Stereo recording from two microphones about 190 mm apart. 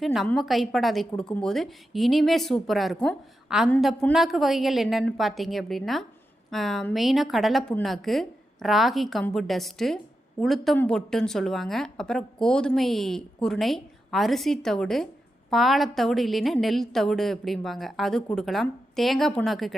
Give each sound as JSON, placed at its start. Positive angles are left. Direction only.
{"t": 0.0, "sound": "a woman's voice", "side_deg": 0}